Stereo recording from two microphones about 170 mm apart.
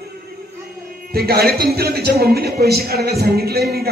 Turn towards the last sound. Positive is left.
turn(degrees=-65)  # may be behind; listen again after turning